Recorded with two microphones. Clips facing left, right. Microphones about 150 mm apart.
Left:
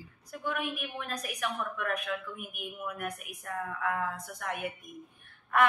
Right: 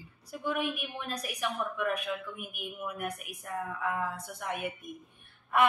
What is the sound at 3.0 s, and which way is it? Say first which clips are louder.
A woman's voice: right 1 dB; 15° right (ahead or behind).